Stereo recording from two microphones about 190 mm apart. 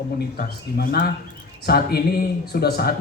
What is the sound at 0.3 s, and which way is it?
A man's voice, 50° left (ahead or behind).